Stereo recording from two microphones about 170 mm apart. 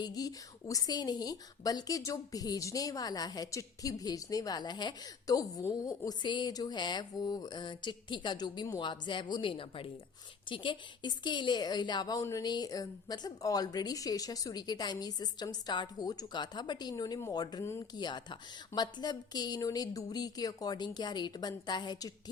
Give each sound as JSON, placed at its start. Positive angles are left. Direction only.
{"t": 0.0, "sound": "a woman's voice", "side_deg": 20}